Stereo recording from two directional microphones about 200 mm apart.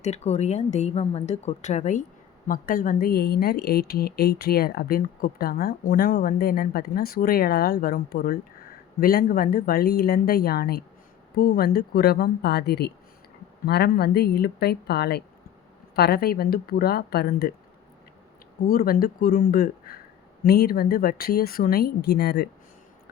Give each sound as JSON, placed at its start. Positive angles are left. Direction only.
{"t": 0.0, "sound": "a woman's voice", "side_deg": 35}
{"t": 18.7, "sound": "a woman's voice", "side_deg": 45}